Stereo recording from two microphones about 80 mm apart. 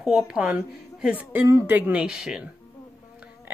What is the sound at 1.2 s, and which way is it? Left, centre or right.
Speech, right.